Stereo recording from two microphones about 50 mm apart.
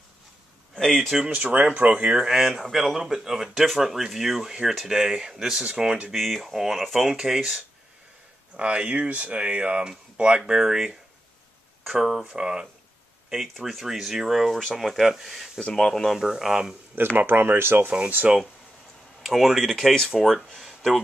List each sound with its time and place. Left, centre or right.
1.3 s speech: right
2.1 s speech: centre
6.1 s speech: centre
8.5 s speech: right; by 12.4 s centre
12.4 s speech: centre
13.3 s speech: centre
15.6 s speech: centre
17.2 s speech: right
17.8 s speech: right
19.2 s speech: centre
20.2 s speech: centre
20.5 s a sound: centre